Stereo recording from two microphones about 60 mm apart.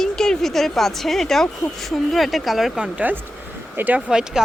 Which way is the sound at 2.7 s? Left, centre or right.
Right.